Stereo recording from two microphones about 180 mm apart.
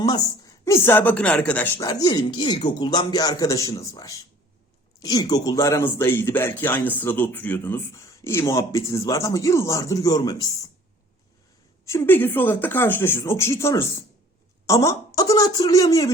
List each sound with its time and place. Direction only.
0.0 s a man's voice: 20° left (ahead or behind)
11.9 s a man's voice: 10° left (ahead or behind)